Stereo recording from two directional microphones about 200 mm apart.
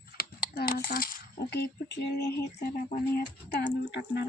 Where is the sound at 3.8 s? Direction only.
60° left (ahead or behind).